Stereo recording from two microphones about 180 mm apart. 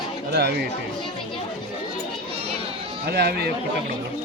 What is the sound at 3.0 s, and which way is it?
Speech, 65° right (ahead or behind).